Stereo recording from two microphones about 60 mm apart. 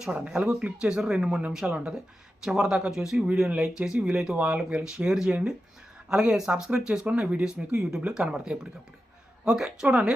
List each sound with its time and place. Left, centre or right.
0.0 s speech: centre